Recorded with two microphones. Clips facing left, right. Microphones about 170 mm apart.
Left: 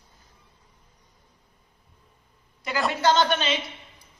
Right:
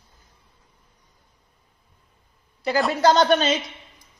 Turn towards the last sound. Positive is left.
turn(degrees=-40)  # may be behind; listen again after turning